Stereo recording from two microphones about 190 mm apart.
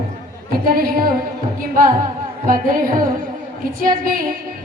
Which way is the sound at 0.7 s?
50° right (ahead or behind).